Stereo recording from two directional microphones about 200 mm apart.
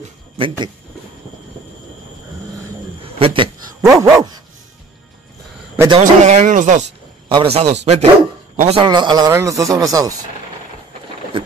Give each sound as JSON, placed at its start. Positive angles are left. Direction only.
{"t": 0.0, "sound": "a sound", "side_deg": -25}
{"t": 3.0, "sound": "a sound", "side_deg": -25}
{"t": 3.8, "sound": "speech", "side_deg": -15}
{"t": 5.9, "sound": "speech", "side_deg": -35}
{"t": 7.2, "sound": "a man's voice", "side_deg": -30}
{"t": 8.8, "sound": "speech", "side_deg": -20}